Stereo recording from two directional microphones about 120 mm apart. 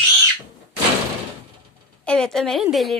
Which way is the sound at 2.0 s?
5° left (ahead or behind).